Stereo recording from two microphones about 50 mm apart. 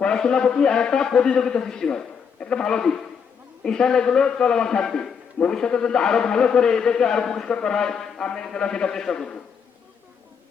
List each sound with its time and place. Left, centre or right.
0.0 s a man's voice: centre